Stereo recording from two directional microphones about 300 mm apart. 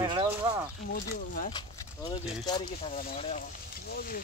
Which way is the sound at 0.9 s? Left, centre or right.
Left.